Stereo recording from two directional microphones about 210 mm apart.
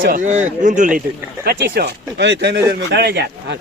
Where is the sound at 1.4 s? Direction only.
50° right (ahead or behind).